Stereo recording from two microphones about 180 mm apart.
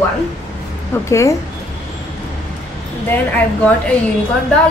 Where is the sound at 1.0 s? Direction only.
15° left (ahead or behind).